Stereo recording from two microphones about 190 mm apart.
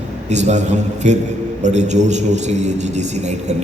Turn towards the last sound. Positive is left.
turn(degrees=-40)  # may be behind; listen again after turning